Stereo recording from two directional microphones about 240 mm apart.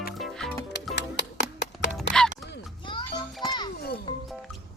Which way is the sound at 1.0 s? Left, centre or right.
Left.